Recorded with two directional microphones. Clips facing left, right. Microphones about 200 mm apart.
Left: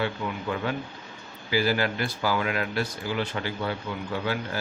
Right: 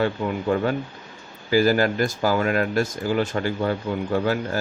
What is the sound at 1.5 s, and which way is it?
Speech, 45° right (ahead or behind).